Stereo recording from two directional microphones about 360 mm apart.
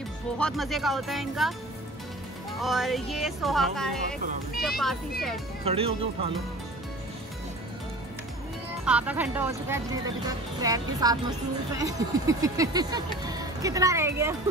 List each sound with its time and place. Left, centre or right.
0.4 s speech: centre
2.6 s speech: centre
5.6 s speech: centre
8.8 s speech: centre